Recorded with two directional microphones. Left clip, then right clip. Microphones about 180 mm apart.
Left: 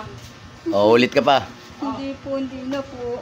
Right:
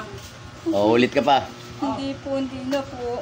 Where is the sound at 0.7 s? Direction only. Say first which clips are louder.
Left 4 dB; 35° left (ahead or behind).